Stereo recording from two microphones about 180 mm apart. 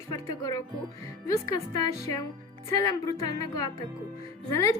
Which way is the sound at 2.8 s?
20° left (ahead or behind).